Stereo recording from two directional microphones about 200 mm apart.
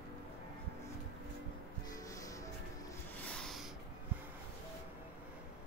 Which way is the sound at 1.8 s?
15° left (ahead or behind).